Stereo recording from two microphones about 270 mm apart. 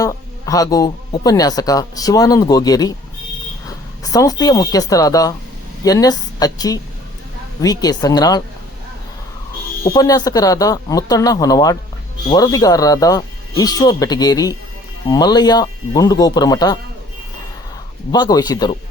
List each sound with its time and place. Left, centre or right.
0.0 s speech: centre
9.8 s speech: centre
18.1 s speech: centre